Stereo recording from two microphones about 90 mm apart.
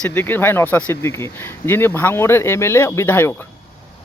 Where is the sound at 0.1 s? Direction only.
25° left (ahead or behind).